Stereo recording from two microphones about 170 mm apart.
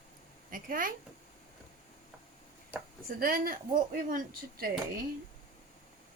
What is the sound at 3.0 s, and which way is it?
Speech, 60° right (ahead or behind).